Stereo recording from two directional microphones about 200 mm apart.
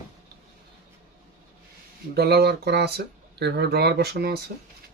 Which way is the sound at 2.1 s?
50° right (ahead or behind).